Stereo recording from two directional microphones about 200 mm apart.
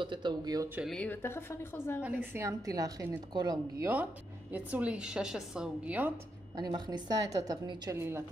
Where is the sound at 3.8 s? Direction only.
10° right (ahead or behind).